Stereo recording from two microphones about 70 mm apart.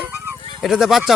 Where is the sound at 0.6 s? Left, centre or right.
Centre.